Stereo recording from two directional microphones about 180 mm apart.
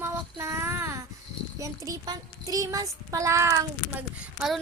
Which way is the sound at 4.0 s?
5° right (ahead or behind).